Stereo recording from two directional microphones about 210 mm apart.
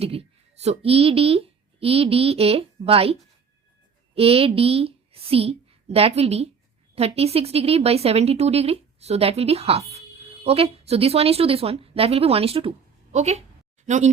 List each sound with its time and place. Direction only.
0.0 s a woman's voice: 30° right (ahead or behind)